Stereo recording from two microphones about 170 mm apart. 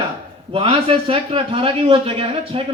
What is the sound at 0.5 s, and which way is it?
A man's voice, 30° right (ahead or behind).